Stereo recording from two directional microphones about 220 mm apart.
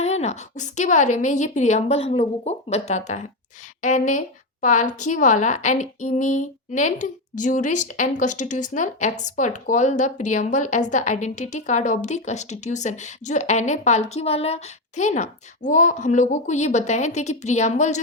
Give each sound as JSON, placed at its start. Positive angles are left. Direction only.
{"t": 0.0, "sound": "a woman's voice", "side_deg": 30}